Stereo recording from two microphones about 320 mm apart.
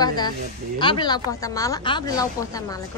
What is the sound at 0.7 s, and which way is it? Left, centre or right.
Speech, centre.